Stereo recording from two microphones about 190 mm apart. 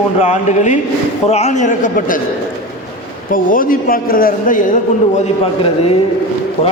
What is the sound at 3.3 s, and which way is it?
A man's voice, 45° left (ahead or behind).